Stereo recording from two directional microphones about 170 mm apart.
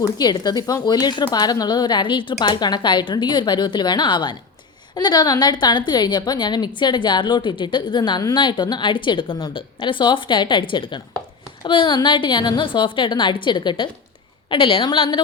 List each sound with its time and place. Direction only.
0.2 s a woman's voice: 25° left (ahead or behind)